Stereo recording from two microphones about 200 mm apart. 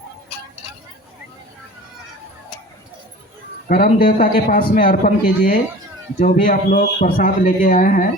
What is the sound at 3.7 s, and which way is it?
A man's voice, 45° left (ahead or behind).